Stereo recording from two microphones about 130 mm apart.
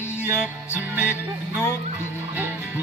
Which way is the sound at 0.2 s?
15° right (ahead or behind).